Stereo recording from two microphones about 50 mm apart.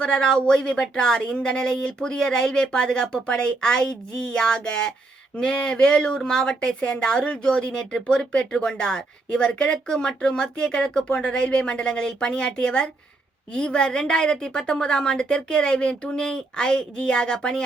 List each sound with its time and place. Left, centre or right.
0.0 s speech: centre